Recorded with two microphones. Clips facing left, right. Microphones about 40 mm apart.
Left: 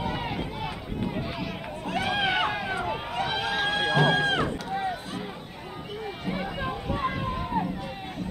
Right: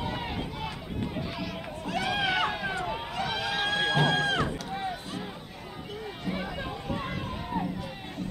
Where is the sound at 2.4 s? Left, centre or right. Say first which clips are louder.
Left 2 dB; centre.